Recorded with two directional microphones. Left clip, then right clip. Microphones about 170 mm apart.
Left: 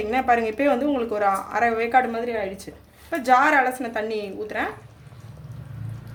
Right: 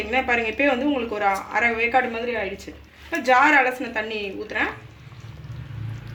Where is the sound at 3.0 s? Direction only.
65° left (ahead or behind).